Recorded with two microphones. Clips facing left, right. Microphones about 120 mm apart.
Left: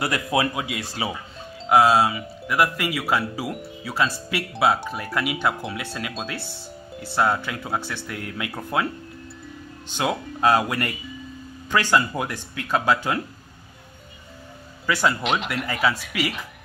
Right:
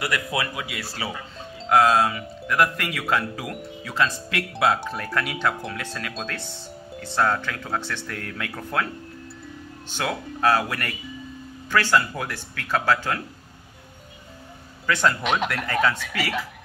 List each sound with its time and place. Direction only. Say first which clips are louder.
0.0 s speech: left 4 dB; 25° left (ahead or behind)
1.7 s speech: left 1 dB; 10° left (ahead or behind)
9.8 s speech: left 3 dB; 20° left (ahead or behind)
14.9 s speech: even; 5° left (ahead or behind)